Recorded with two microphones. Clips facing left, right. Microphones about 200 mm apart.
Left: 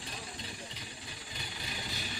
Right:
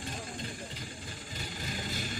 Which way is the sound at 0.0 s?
50° right (ahead or behind).